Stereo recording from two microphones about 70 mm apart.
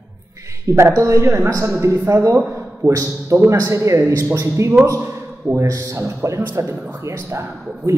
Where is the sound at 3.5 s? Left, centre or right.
Right.